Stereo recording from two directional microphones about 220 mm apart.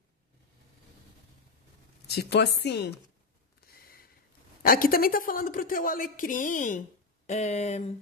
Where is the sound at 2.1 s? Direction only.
50° left (ahead or behind).